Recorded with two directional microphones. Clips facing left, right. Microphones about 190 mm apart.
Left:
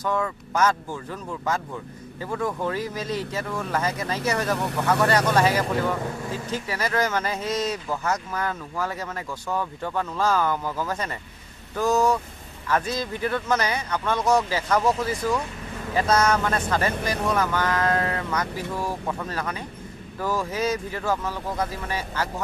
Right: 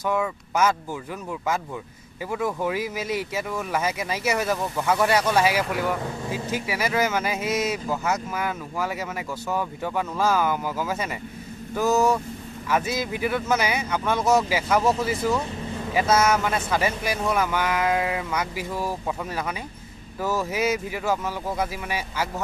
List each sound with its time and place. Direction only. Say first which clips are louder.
0.0 s speech: right 1 dB; 10° right (ahead or behind)
4.6 s speech: left 1 dB; 70° left (ahead or behind)
4.8 s speech: even; 10° right (ahead or behind)